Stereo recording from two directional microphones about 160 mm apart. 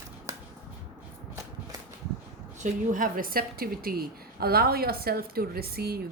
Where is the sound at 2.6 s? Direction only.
55° right (ahead or behind).